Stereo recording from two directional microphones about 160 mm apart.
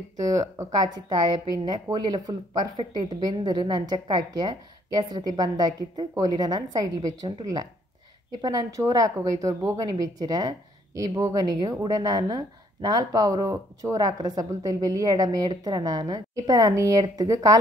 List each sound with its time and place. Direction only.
0.3 s a woman's voice: 25° right (ahead or behind)